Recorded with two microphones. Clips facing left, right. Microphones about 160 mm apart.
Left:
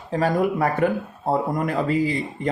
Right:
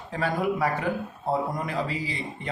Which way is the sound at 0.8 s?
60° left (ahead or behind).